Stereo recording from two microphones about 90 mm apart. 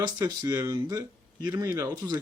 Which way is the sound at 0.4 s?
35° right (ahead or behind).